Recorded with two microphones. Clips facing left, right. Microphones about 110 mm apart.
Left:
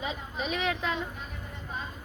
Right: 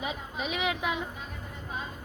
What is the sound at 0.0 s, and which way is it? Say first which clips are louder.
Speech: even; 10° right (ahead or behind).